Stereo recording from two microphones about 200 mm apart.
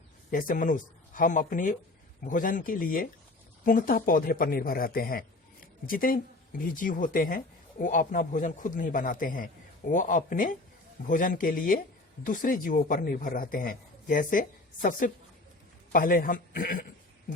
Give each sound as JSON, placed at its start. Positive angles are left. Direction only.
{"t": 0.3, "sound": "speech", "side_deg": 45}